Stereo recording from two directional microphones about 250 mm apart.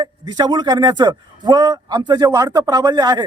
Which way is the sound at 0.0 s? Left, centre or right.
Centre.